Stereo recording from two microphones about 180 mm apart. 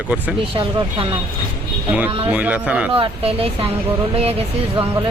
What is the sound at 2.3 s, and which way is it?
Speech, 10° right (ahead or behind).